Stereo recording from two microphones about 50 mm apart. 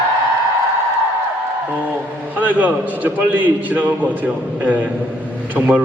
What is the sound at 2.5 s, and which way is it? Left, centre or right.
A man's voice, right.